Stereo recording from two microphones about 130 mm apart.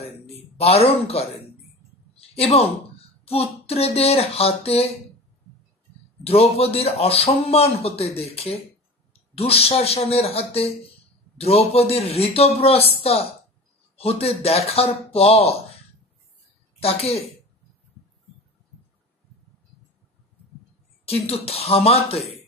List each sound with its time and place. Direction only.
0.0 s a man's voice: 50° left (ahead or behind)
2.1 s a sound: 50° left (ahead or behind)
3.3 s a man's voice: 50° left (ahead or behind)
6.2 s a man's voice: 50° left (ahead or behind)
16.8 s a man's voice: 50° left (ahead or behind)
21.0 s a man's voice: 50° left (ahead or behind)